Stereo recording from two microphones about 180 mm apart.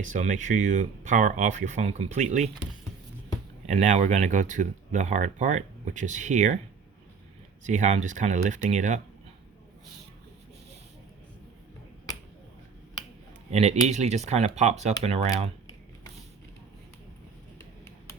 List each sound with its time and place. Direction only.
0.0 s speech: 45° right (ahead or behind)
3.7 s speech: 40° right (ahead or behind)
7.6 s speech: 40° right (ahead or behind)
13.5 s speech: 40° right (ahead or behind)